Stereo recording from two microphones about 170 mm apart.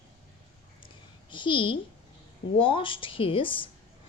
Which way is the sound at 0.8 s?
30° left (ahead or behind).